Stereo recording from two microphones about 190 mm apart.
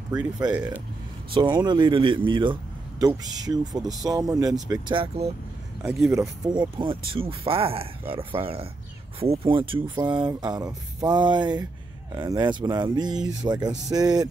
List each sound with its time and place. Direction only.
0.1 s a man's voice: 20° right (ahead or behind)
5.8 s a man's voice: 15° right (ahead or behind)